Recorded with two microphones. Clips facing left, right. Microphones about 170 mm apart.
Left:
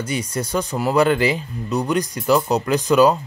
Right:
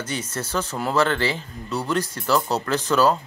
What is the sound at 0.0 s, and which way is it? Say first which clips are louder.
Speech: left 5 dB; 10° left (ahead or behind).